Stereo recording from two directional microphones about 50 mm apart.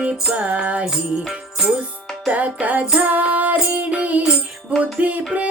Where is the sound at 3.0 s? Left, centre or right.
Right.